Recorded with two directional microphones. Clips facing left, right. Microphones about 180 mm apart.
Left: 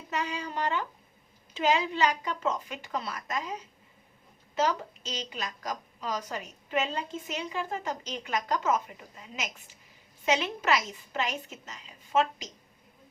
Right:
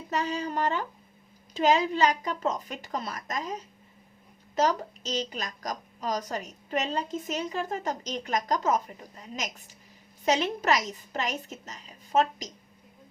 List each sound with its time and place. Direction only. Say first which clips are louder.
0.1 s a woman's voice: right 4 dB; 40° right (ahead or behind)